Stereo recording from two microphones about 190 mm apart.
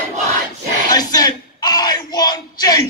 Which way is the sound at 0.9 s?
20° left (ahead or behind).